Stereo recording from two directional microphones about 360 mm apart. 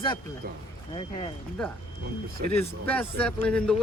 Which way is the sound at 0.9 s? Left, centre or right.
Centre.